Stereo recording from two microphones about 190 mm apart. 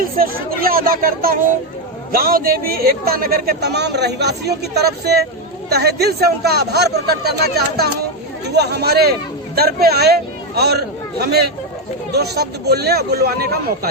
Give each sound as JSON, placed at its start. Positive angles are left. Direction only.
{"t": 0.0, "sound": "speech", "side_deg": -50}